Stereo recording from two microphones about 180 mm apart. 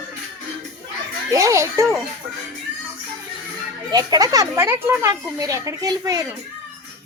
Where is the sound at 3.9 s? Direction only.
20° right (ahead or behind).